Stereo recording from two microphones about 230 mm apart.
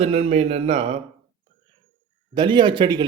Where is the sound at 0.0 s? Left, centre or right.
Right.